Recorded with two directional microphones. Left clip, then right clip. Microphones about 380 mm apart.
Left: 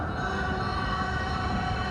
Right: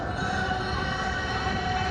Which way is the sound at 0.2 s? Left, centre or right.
Centre.